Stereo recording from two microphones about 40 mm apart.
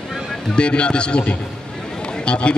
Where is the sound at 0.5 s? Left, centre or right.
Left.